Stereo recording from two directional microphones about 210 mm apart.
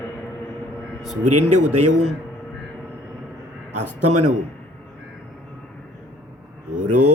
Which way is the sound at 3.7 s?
90° right.